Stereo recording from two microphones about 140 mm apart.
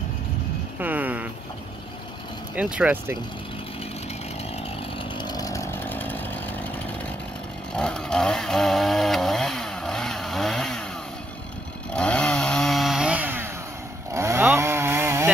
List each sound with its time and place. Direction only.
0.7 s a sound: 10° right (ahead or behind)
2.5 s speech: 10° right (ahead or behind)
5.1 s chainsaw: 30° left (ahead or behind); by 6.4 s 15° left (ahead or behind)
7.7 s chainsaw: 5° left (ahead or behind)
11.9 s chainsaw: 5° left (ahead or behind); by 15.2 s 15° right (ahead or behind)